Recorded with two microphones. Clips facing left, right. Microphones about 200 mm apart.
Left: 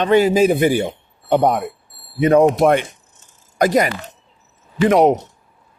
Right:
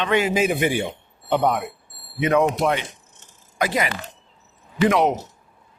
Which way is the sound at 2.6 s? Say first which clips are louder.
Left 7 dB; 50° left (ahead or behind).